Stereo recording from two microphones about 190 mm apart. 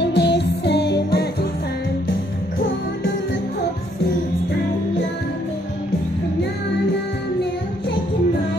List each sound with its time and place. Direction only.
0.0 s music: 60° left (ahead or behind)